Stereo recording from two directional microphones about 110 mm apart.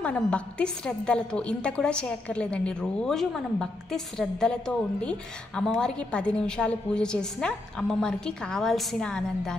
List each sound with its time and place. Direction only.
0.0 s a woman's voice: 10° left (ahead or behind)